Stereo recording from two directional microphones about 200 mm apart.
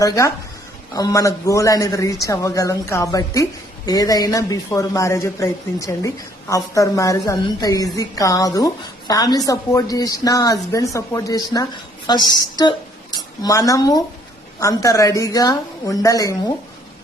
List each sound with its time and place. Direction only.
0.0 s a woman's voice: 15° left (ahead or behind)